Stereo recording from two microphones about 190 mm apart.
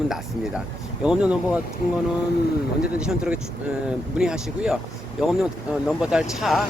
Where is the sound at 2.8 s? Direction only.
5° right (ahead or behind).